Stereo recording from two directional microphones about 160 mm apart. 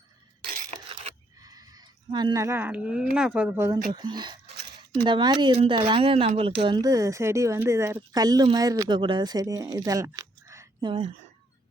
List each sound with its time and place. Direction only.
1.4 s a sound: 25° right (ahead or behind)
2.1 s speech: 25° right (ahead or behind)
3.9 s speech: 25° right (ahead or behind)
10.8 s speech: 35° right (ahead or behind)